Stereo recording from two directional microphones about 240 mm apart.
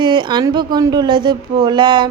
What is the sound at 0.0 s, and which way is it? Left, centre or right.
A woman's voice, centre.